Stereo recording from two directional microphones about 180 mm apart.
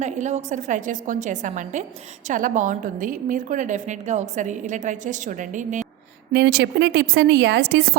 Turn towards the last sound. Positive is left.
turn(degrees=-65)  # may be behind; listen again after turning